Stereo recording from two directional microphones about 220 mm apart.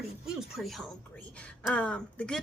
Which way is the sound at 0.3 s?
Centre (ahead or behind).